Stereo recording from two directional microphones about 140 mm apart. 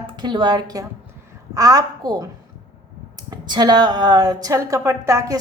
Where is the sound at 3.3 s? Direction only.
30° right (ahead or behind).